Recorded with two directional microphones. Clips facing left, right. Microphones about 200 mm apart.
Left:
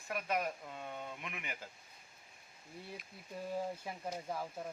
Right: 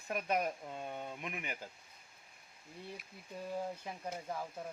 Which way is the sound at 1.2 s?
40° right (ahead or behind).